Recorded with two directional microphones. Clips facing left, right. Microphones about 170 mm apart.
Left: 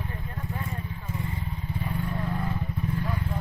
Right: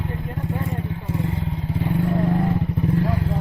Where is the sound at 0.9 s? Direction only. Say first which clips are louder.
Right 9 dB; 85° right.